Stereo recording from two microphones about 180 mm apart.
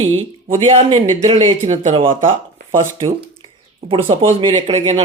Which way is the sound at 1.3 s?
35° right (ahead or behind).